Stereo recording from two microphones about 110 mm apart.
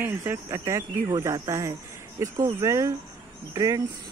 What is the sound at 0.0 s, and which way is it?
Speech, 20° right (ahead or behind).